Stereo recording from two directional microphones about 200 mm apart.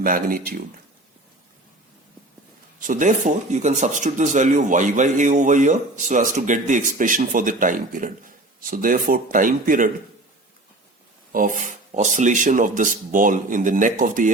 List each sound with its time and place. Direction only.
0.0 s speech: 45° right (ahead or behind)
2.8 s speech: 40° right (ahead or behind)
11.3 s speech: 40° right (ahead or behind)